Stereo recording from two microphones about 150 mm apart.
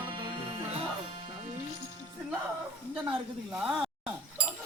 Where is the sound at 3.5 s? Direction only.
5° right (ahead or behind).